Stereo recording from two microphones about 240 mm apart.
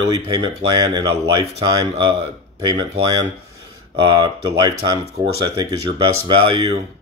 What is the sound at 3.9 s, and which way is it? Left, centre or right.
Speech, centre.